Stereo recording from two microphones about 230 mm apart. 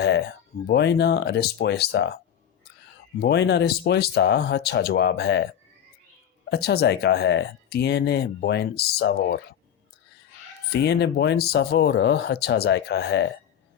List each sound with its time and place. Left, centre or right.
0.7 s speech: left
3.2 s speech: left
6.5 s speech: left
10.7 s speech: left